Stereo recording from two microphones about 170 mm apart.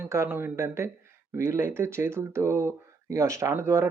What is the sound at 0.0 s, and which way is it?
Speech, 15° right (ahead or behind).